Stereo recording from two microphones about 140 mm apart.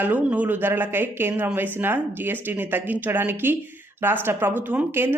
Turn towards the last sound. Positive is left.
turn(degrees=-15)  # may be behind; listen again after turning